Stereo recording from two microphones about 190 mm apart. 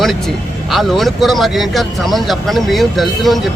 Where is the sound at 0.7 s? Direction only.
Centre (ahead or behind).